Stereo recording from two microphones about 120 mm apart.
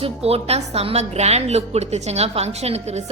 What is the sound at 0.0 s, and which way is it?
A woman's voice, 55° right (ahead or behind).